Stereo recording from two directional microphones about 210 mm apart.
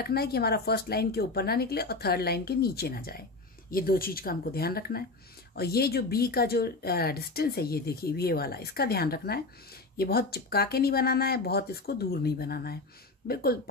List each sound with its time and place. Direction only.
0.0 s speech: 50° left (ahead or behind)